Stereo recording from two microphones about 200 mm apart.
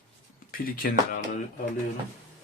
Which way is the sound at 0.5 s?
45° left (ahead or behind).